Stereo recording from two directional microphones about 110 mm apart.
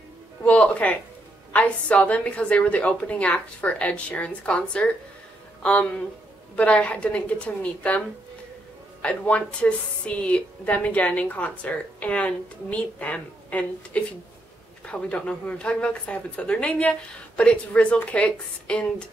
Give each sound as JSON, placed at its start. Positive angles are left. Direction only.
{"t": 0.4, "sound": "music", "side_deg": 15}
{"t": 1.5, "sound": "a woman's voice", "side_deg": 10}
{"t": 9.0, "sound": "a woman's voice", "side_deg": 10}